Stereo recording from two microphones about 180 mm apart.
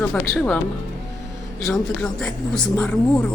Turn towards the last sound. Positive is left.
turn(degrees=5)  # may be behind; listen again after turning